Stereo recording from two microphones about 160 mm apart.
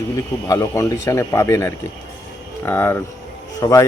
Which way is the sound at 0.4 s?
20° left (ahead or behind).